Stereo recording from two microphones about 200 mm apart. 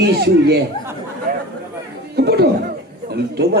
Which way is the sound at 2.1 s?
55° right (ahead or behind).